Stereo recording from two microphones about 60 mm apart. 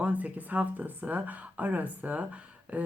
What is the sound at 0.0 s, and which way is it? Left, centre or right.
A woman's voice, right.